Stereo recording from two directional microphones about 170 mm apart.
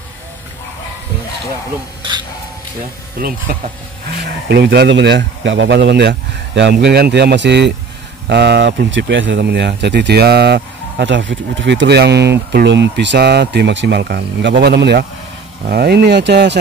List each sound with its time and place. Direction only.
3.2 s speech: 60° right (ahead or behind)
4.5 s speech: 75° right (ahead or behind)